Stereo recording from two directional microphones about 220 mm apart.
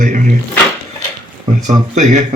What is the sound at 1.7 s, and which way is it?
Speech, 35° right (ahead or behind).